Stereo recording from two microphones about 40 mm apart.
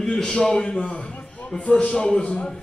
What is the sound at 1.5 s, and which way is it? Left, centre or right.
Speech, centre.